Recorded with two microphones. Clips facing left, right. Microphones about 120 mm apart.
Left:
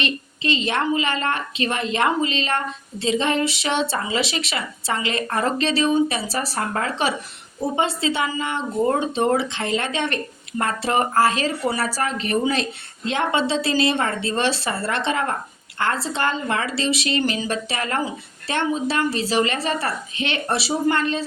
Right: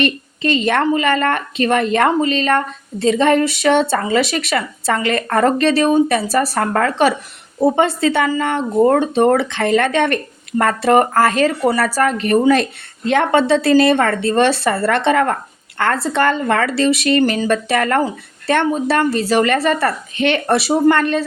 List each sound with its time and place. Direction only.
0.0 s a woman's voice: 50° right (ahead or behind)